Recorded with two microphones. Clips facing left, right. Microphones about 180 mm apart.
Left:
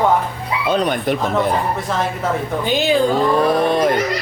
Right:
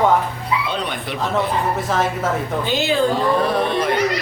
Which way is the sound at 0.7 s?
45° left (ahead or behind).